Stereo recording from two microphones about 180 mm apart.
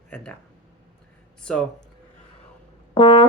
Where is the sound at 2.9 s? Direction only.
25° left (ahead or behind).